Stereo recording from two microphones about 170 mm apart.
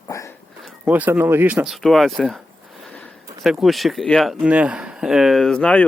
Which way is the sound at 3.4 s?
Centre (ahead or behind).